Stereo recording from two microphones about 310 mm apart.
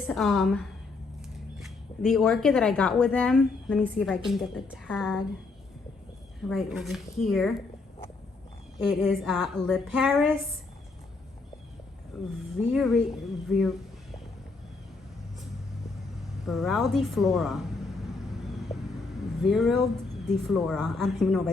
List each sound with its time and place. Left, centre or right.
0.1 s speech: centre
6.5 s speech: centre
8.9 s speech: centre
12.1 s speech: centre
16.5 s a sound: centre
19.4 s speech: centre